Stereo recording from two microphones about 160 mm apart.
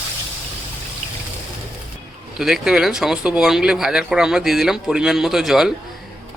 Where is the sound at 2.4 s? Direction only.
5° right (ahead or behind).